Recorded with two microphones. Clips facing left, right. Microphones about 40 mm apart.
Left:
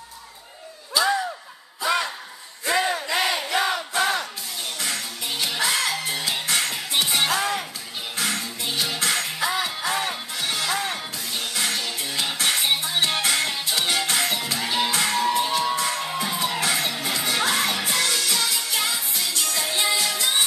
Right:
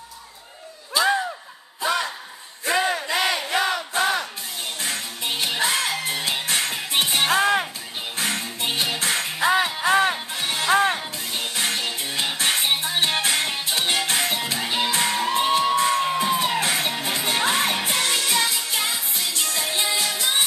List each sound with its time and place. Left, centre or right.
0.9 s a sound: right
2.8 s a sound: centre
3.1 s crowd: right
3.5 s crowd: centre
3.9 s battle cry: right
4.7 s music: right